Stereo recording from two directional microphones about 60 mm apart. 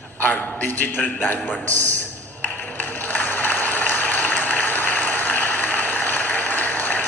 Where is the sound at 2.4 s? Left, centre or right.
Left.